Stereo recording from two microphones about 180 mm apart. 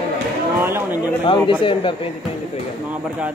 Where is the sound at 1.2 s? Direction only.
30° left (ahead or behind).